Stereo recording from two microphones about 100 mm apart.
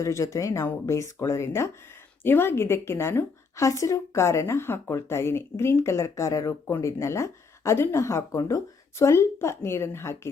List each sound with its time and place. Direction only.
0.0 s a woman's voice: 30° left (ahead or behind)